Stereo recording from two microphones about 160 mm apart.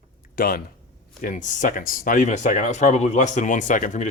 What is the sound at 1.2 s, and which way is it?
Speech, 55° left (ahead or behind).